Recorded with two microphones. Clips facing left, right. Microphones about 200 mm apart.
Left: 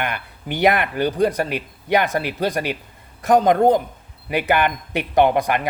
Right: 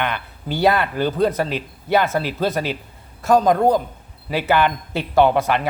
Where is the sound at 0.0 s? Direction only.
15° left (ahead or behind).